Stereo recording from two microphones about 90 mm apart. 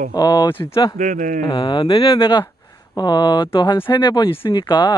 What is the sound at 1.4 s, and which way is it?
Speech, 65° left (ahead or behind).